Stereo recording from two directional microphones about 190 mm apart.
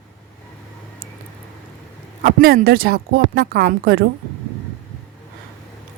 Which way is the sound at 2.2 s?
50° right (ahead or behind).